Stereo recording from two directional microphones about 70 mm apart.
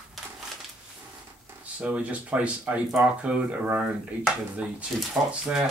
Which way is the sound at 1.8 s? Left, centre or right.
Centre.